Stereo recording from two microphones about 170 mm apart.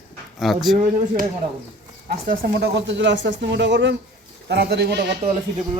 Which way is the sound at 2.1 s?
60° right (ahead or behind).